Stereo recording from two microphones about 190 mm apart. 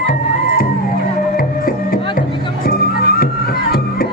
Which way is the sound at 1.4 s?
50° left (ahead or behind).